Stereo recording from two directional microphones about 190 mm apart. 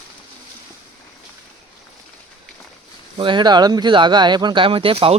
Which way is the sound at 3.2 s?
25° right (ahead or behind).